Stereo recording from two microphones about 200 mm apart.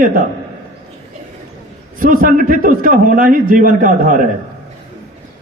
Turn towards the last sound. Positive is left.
turn(degrees=-40)  # may be behind; listen again after turning